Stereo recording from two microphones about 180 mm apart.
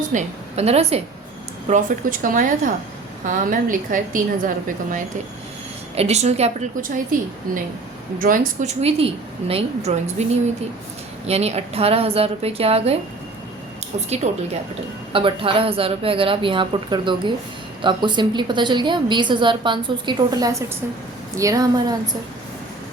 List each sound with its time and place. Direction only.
0.1 s a woman's voice: 40° right (ahead or behind)
6.0 s a woman's voice: 35° right (ahead or behind)
8.8 s a woman's voice: 35° right (ahead or behind)
11.3 s a woman's voice: 35° right (ahead or behind)
14.2 s a woman's voice: 40° right (ahead or behind); by 21.9 s 20° right (ahead or behind)